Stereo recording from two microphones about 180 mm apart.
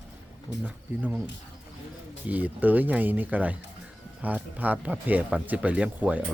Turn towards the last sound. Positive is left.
turn(degrees=-10)  # may be behind; listen again after turning